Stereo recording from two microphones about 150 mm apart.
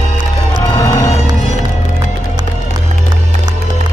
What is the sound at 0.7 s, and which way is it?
Music, 25° left (ahead or behind).